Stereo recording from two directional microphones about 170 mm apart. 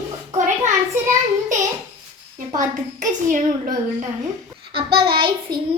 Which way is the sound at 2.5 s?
50° right (ahead or behind).